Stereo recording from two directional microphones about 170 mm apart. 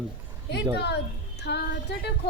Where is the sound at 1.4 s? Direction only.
75° left (ahead or behind).